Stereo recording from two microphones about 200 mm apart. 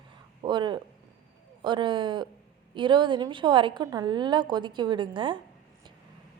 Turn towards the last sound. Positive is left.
turn(degrees=-25)  # may be behind; listen again after turning